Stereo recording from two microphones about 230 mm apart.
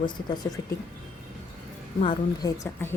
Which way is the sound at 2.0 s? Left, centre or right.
Centre.